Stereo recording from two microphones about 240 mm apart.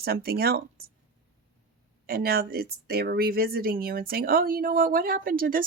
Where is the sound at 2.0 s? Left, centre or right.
Right.